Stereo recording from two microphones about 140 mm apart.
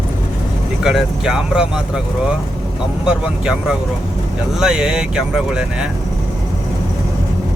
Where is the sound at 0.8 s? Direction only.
5° right (ahead or behind).